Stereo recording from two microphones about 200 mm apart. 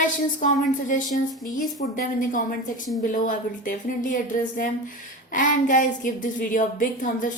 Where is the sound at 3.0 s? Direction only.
40° left (ahead or behind).